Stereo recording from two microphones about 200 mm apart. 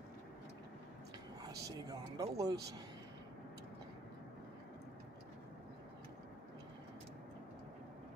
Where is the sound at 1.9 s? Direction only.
15° right (ahead or behind).